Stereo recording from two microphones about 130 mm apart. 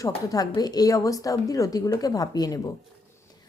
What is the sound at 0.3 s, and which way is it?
A woman's voice, 30° left (ahead or behind).